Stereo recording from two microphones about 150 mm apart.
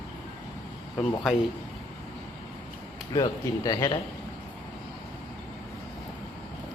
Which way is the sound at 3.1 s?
25° left (ahead or behind).